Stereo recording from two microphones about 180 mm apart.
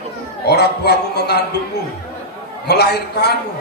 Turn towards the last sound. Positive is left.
turn(degrees=65)  # may be behind; listen again after turning